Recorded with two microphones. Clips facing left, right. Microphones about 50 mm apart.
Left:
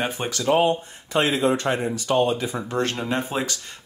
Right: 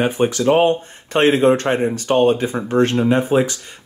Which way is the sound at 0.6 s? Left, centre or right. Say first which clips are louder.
Right 5 dB; right.